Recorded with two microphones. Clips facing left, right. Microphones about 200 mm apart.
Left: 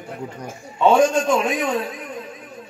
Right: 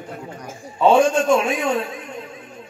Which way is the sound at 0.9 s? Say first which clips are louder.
Right 1 dB; 30° right (ahead or behind).